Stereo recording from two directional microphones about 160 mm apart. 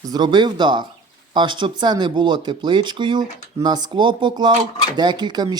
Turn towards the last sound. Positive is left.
turn(degrees=-25)  # may be behind; listen again after turning